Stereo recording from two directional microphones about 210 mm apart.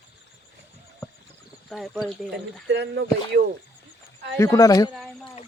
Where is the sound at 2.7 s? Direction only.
55° right (ahead or behind).